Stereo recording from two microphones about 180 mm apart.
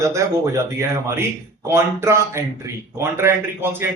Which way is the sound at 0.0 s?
15° right (ahead or behind).